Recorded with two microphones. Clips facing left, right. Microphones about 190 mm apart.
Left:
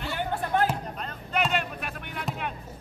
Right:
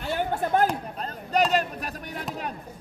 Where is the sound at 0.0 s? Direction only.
40° right (ahead or behind).